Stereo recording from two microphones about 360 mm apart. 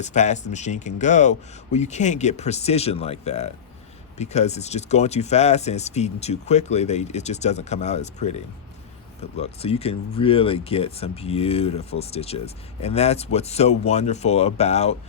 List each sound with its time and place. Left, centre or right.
0.0 s speech: centre
9.4 s speech: centre